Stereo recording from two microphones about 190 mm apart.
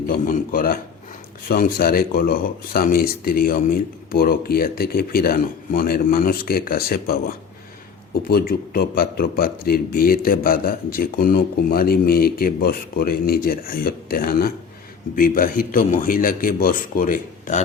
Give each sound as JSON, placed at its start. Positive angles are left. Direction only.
{"t": 0.1, "sound": "speech", "side_deg": 50}